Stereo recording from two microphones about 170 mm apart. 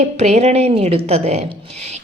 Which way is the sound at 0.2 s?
40° right (ahead or behind).